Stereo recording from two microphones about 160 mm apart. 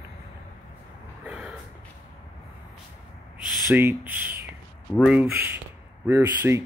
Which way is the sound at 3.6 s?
15° right (ahead or behind).